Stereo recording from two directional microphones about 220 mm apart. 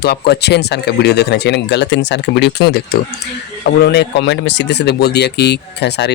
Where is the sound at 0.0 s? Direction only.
50° left (ahead or behind).